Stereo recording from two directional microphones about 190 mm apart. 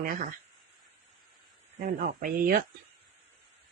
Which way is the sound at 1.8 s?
45° right (ahead or behind).